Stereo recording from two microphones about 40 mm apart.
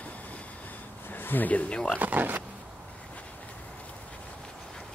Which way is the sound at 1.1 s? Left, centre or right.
Left.